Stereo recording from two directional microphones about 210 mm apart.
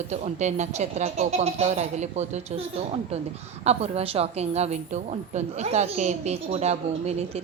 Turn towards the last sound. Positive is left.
turn(degrees=-30)  # may be behind; listen again after turning